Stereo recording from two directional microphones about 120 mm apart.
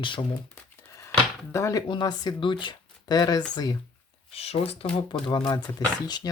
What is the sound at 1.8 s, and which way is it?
Speech, 40° left (ahead or behind).